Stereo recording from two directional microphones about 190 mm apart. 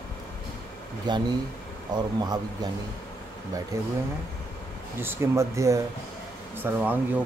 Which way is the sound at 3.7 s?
15° right (ahead or behind).